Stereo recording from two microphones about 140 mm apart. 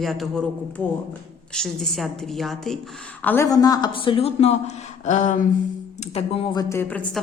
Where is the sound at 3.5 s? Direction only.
25° left (ahead or behind); by 5.5 s 60° left (ahead or behind).